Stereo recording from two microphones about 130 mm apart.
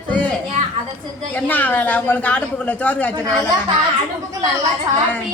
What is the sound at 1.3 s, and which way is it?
A woman's voice, 15° left (ahead or behind).